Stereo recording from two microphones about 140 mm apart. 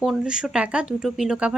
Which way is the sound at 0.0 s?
5° right (ahead or behind).